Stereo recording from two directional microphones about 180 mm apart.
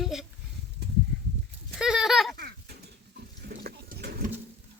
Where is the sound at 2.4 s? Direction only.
65° right (ahead or behind).